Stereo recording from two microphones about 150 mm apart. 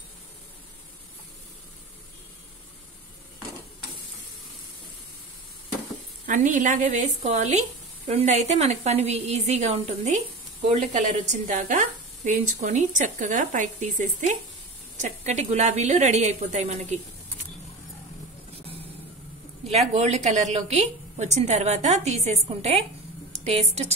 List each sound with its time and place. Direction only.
6.2 s a woman's voice: 55° right (ahead or behind)
19.7 s a woman's voice: 45° right (ahead or behind)